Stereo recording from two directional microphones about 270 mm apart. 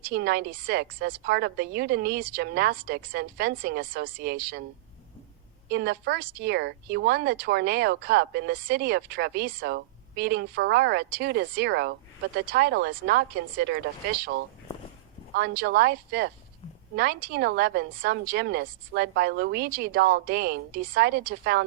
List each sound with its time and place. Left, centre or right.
0.0 s speech: right
5.7 s speech: right
15.4 s speech: right